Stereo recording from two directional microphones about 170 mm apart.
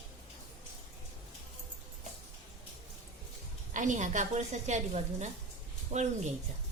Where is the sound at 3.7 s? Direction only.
45° right (ahead or behind).